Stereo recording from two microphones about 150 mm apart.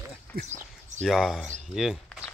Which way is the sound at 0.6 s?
50° right (ahead or behind).